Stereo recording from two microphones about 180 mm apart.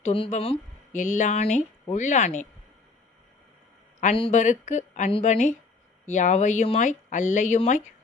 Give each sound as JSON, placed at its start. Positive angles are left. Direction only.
{"t": 0.0, "sound": "speech", "side_deg": 35}
{"t": 4.0, "sound": "speech", "side_deg": 35}